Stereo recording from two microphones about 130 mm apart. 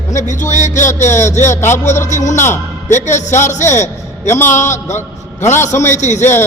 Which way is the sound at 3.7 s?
65° left (ahead or behind).